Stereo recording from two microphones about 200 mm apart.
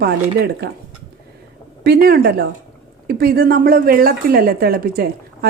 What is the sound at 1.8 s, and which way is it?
A woman's voice, 50° right (ahead or behind).